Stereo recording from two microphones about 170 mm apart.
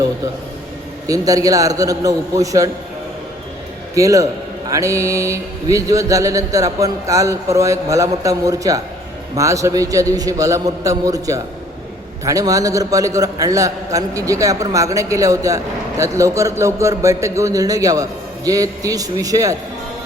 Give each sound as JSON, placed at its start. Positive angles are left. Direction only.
{"t": 1.0, "sound": "a man's voice", "side_deg": -20}
{"t": 3.9, "sound": "a man's voice", "side_deg": -20}
{"t": 4.7, "sound": "mantra", "side_deg": -20}
{"t": 5.7, "sound": "a man's voice", "side_deg": -20}